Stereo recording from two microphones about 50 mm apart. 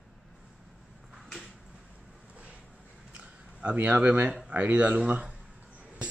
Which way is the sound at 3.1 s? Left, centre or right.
Right.